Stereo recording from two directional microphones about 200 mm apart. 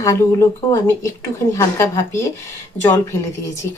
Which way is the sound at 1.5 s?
15° left (ahead or behind).